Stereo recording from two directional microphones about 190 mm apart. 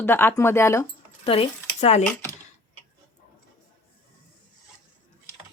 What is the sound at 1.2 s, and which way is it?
Speech, 30° left (ahead or behind).